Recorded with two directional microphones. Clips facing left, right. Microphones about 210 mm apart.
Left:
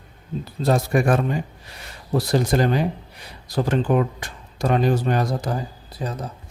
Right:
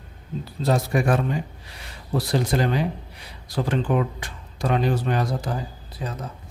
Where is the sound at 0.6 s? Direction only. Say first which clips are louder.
Left 2 dB; 50° left (ahead or behind).